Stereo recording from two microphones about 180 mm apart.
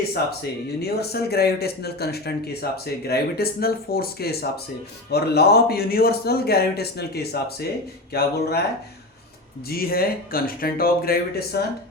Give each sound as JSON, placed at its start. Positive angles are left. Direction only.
{"t": 0.8, "sound": "speech", "side_deg": 60}
{"t": 9.6, "sound": "speech", "side_deg": 55}